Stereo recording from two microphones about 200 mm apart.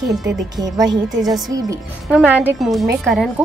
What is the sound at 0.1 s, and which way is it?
A woman's voice, 20° right (ahead or behind).